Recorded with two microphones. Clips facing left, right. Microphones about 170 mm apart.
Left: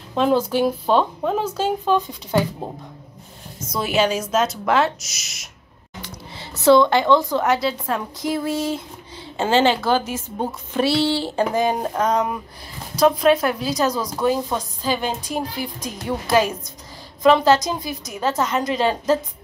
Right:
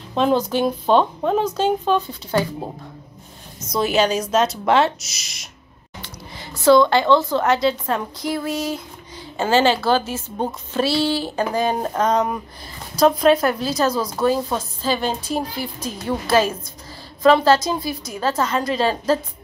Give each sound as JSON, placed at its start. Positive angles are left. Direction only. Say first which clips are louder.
{"t": 0.1, "sound": "a woman's voice", "louder": "even", "side_deg": 5}
{"t": 3.7, "sound": "a woman's voice", "louder": "right 2 dB", "side_deg": 5}
{"t": 4.6, "sound": "speech", "louder": "right 2 dB", "side_deg": -30}
{"t": 5.2, "sound": "a woman's voice", "louder": "right 1 dB", "side_deg": 5}
{"t": 6.6, "sound": "a woman's voice", "louder": "even", "side_deg": 20}
{"t": 8.2, "sound": "a woman's voice", "louder": "left 1 dB", "side_deg": 25}
{"t": 11.0, "sound": "a woman's voice", "louder": "left 1 dB", "side_deg": 25}
{"t": 11.6, "sound": "a woman's voice", "louder": "even", "side_deg": 10}
{"t": 13.9, "sound": "a woman's voice", "louder": "right 2 dB", "side_deg": -5}
{"t": 14.8, "sound": "a woman's voice", "louder": "right 2 dB", "side_deg": 15}